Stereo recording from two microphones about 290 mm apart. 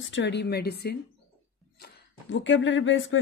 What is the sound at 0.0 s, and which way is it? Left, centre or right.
Speech, left.